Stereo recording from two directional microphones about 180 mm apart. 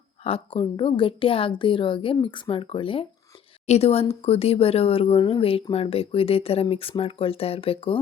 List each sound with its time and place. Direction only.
0.3 s a woman's voice: 30° left (ahead or behind)